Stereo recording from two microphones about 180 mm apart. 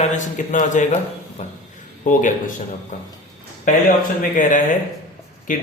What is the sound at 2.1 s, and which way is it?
Speech, 45° left (ahead or behind).